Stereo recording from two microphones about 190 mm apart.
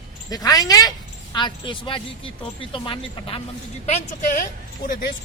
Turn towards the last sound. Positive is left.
turn(degrees=50)  # may be behind; listen again after turning